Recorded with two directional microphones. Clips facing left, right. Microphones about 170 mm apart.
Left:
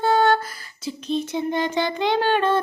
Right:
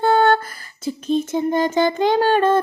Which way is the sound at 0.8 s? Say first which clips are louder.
Right 5 dB; 45° right (ahead or behind).